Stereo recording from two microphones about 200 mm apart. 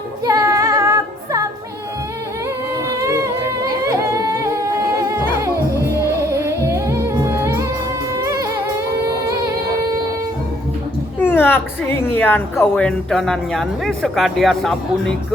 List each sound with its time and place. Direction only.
0.3 s music: 15° right (ahead or behind)
3.0 s music: 15° right (ahead or behind)
11.2 s speech: 10° left (ahead or behind)